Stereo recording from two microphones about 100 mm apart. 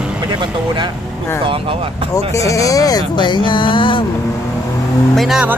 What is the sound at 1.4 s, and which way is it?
Speech, 70° right (ahead or behind).